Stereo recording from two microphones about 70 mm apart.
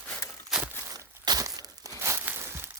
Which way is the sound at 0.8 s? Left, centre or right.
Right.